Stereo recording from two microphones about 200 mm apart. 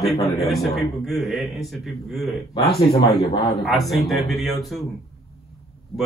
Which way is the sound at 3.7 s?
Centre (ahead or behind).